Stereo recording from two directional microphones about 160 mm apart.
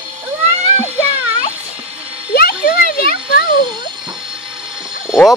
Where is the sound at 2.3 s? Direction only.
65° left (ahead or behind).